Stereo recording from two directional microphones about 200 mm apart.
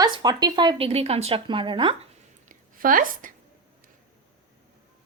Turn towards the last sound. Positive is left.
turn(degrees=-45)  # may be behind; listen again after turning